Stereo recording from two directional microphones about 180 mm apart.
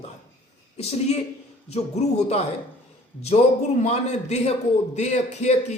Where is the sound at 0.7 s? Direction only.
35° left (ahead or behind).